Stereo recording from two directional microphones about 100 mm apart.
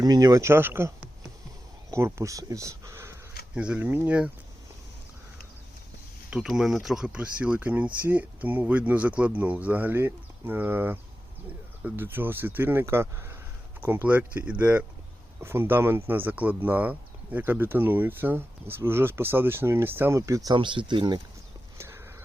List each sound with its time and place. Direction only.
0.0 s speech: 40° right (ahead or behind)
3.5 s speech: 10° right (ahead or behind)
6.3 s speech: 5° right (ahead or behind); by 20.6 s 35° right (ahead or behind)
20.6 s speech: 55° right (ahead or behind)
21.8 s a sound: 25° right (ahead or behind)